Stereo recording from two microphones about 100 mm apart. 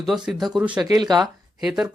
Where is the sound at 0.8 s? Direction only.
45° right (ahead or behind).